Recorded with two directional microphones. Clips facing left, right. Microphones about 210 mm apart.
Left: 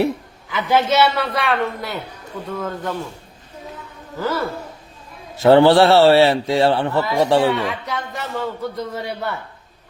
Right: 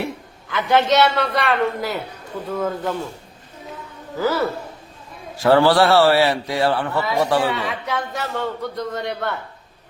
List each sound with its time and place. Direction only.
0.5 s speech: 5° left (ahead or behind)
4.2 s speech: 5° right (ahead or behind)
5.4 s a man's voice: 25° left (ahead or behind)
7.5 s speech: centre (ahead or behind)